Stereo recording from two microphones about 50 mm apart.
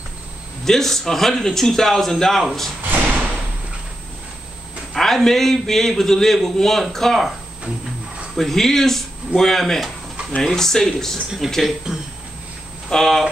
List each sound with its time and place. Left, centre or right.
0.7 s a man's voice: centre
2.9 s a sound: right
4.9 s a man's voice: centre
8.4 s a man's voice: centre
12.9 s a man's voice: centre